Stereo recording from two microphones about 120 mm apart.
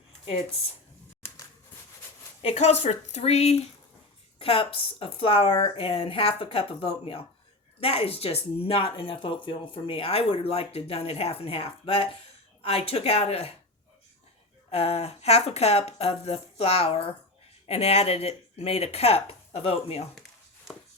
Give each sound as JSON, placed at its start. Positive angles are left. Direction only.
{"t": 2.4, "sound": "speech", "side_deg": 65}
{"t": 14.7, "sound": "speech", "side_deg": 60}